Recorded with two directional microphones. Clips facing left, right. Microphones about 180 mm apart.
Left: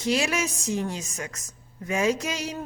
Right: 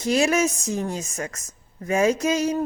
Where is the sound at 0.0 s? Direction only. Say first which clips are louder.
Right 5 dB; 45° right (ahead or behind).